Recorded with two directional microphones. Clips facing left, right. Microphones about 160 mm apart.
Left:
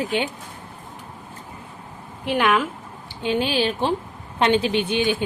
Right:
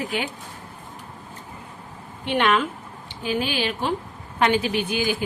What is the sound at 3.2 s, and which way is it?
A woman's voice, 30° left (ahead or behind).